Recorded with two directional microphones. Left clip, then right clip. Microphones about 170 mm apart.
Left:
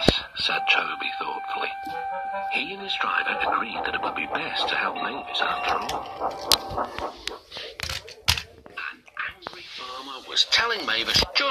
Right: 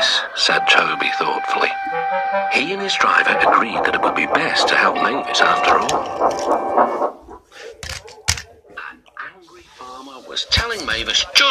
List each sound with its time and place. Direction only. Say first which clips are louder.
0.0 s speech: right 7 dB; 40° right (ahead or behind)
6.4 s music: right 5 dB; 45° right (ahead or behind); by 7.2 s 60° right (ahead or behind)
10.5 s speech: right 7 dB; 20° right (ahead or behind)